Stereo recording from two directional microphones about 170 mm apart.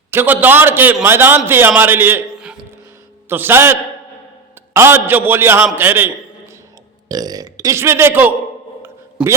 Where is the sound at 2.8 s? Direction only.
15° right (ahead or behind).